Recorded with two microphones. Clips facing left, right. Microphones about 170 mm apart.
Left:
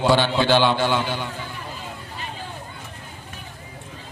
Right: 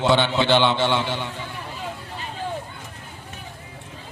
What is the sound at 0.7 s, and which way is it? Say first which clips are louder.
Speech: even; 25° right (ahead or behind).